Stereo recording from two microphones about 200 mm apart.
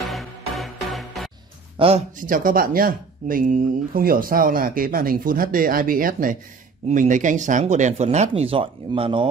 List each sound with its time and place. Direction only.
0.0 s music: centre (ahead or behind)
1.8 s speech: 30° right (ahead or behind)
2.1 s speech: 45° right (ahead or behind); by 9.3 s 25° right (ahead or behind)